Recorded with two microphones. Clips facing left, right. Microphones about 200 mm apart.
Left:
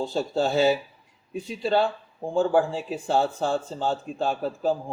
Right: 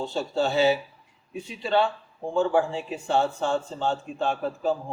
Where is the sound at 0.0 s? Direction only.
40° left (ahead or behind).